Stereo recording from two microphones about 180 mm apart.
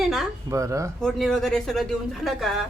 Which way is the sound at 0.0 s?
Centre (ahead or behind).